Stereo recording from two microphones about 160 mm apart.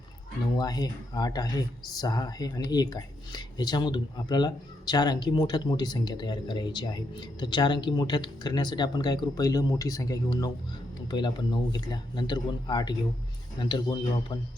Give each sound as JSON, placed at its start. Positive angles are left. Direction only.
{"t": 0.5, "sound": "speech", "side_deg": 25}